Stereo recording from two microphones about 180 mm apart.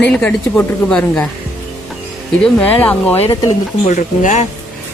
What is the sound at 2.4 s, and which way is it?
Speech, 10° left (ahead or behind).